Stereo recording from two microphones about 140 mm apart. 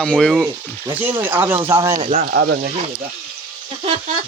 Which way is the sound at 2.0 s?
90° right.